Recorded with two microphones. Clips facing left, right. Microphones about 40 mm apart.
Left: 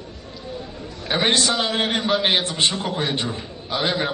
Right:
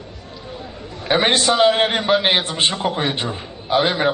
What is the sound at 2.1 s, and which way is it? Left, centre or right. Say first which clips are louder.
A man's voice: right 3 dB; centre.